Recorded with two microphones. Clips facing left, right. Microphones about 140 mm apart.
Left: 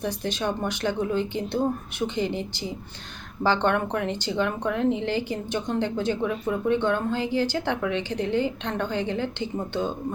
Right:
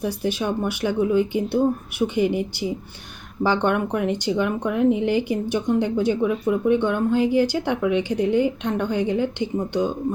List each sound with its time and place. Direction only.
0.0 s speech: 10° right (ahead or behind)